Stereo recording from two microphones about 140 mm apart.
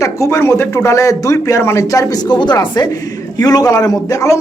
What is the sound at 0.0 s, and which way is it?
Speech, 20° left (ahead or behind).